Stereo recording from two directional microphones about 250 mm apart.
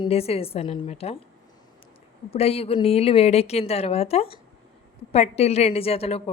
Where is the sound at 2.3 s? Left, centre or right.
Left.